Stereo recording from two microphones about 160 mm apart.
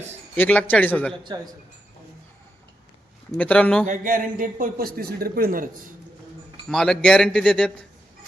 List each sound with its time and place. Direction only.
0.3 s a man's voice: 10° left (ahead or behind)
3.3 s a man's voice: 5° left (ahead or behind)
3.8 s a man's voice: 55° right (ahead or behind)
6.7 s speech: 5° left (ahead or behind)